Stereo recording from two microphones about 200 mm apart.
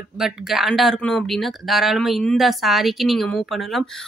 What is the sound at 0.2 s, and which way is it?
Speech, centre (ahead or behind).